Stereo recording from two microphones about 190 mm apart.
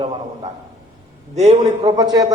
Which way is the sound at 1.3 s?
35° right (ahead or behind).